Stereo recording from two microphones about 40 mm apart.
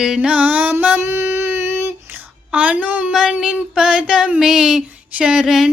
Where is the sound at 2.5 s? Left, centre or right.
Right.